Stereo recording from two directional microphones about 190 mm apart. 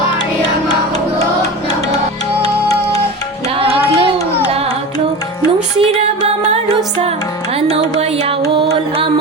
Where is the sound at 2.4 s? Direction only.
20° left (ahead or behind).